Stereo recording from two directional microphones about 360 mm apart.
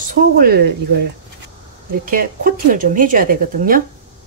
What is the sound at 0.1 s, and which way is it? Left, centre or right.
Speech, right.